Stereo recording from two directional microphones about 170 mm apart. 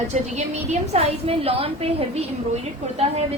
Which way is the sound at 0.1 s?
40° right (ahead or behind).